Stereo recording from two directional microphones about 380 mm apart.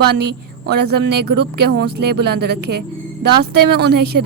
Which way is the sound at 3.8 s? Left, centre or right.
Right.